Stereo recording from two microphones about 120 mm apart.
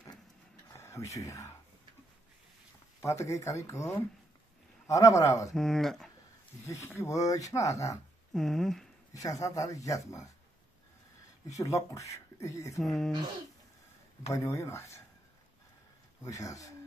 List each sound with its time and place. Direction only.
0.7 s speech: 25° left (ahead or behind)
3.0 s speech: 25° left (ahead or behind)
4.8 s speech: 25° left (ahead or behind)
5.5 s speech: 5° left (ahead or behind)
6.6 s speech: 20° left (ahead or behind)
8.3 s speech: 5° left (ahead or behind)
9.1 s speech: 30° left (ahead or behind)
11.4 s speech: 30° left (ahead or behind)
12.8 s speech: centre (ahead or behind)
14.3 s speech: 25° left (ahead or behind)
16.2 s speech: 30° left (ahead or behind)